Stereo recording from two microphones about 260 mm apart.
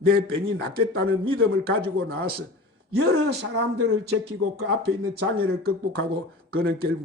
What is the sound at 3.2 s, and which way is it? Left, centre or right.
Speech, right.